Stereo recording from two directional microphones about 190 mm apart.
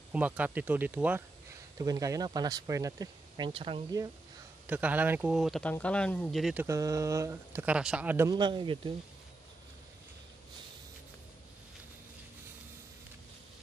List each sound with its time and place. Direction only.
0.1 s speech: 10° right (ahead or behind)
4.6 s speech: 10° right (ahead or behind)
8.3 s speech: 25° right (ahead or behind)